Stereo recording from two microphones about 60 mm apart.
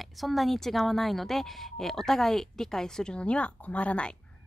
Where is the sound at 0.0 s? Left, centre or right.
Centre.